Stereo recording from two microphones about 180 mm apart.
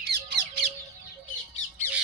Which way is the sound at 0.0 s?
65° right (ahead or behind).